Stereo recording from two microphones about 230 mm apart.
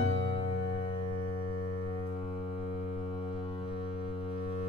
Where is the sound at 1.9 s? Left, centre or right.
Left.